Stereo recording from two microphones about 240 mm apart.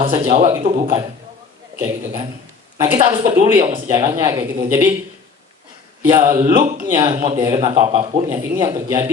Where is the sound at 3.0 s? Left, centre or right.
Centre.